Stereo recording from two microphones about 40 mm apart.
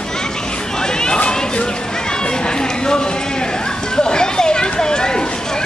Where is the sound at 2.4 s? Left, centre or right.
Centre.